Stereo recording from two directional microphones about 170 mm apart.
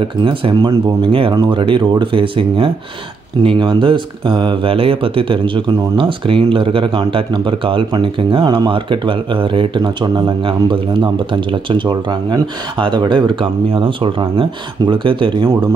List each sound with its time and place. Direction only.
0.2 s speech: 30° right (ahead or behind)